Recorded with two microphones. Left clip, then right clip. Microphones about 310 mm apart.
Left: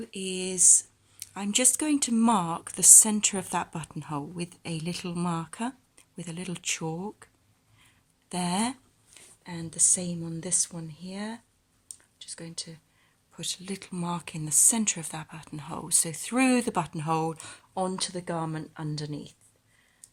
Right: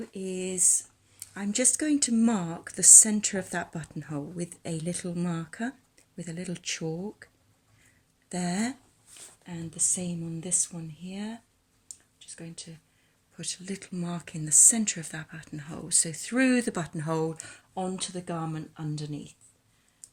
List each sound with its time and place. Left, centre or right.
0.1 s speech: centre
8.3 s speech: centre